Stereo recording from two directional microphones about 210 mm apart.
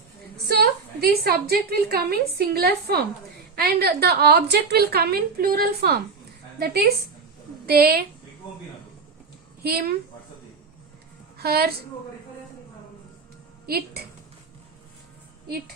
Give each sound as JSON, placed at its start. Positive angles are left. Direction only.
{"t": 0.4, "sound": "a woman's voice", "side_deg": -50}
{"t": 9.6, "sound": "a woman's voice", "side_deg": -45}
{"t": 11.3, "sound": "a woman's voice", "side_deg": -50}
{"t": 13.7, "sound": "a woman's voice", "side_deg": -50}